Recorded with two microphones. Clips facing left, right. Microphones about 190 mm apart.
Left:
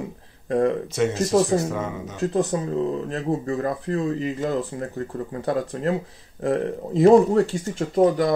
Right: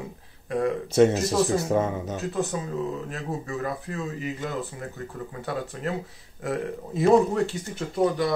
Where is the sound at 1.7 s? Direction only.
35° right (ahead or behind).